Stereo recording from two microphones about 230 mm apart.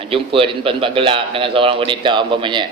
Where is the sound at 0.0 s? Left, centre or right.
Right.